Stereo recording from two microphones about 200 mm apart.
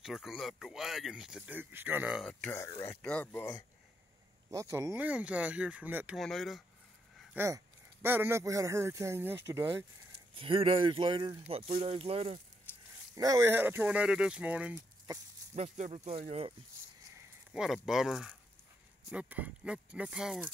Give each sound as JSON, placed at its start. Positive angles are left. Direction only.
{"t": 0.0, "sound": "speech", "side_deg": 0}
{"t": 4.5, "sound": "speech", "side_deg": -15}
{"t": 7.3, "sound": "speech", "side_deg": -10}
{"t": 10.3, "sound": "speech", "side_deg": -25}
{"t": 12.7, "sound": "a sound", "side_deg": 10}
{"t": 13.1, "sound": "speech", "side_deg": -15}
{"t": 15.5, "sound": "speech", "side_deg": -35}
{"t": 17.5, "sound": "speech", "side_deg": 0}